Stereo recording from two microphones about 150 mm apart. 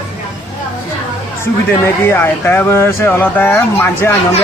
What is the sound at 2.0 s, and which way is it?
Speech, 15° left (ahead or behind).